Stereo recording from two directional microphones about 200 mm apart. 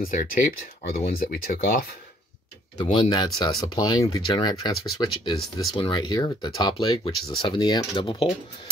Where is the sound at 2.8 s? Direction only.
35° left (ahead or behind).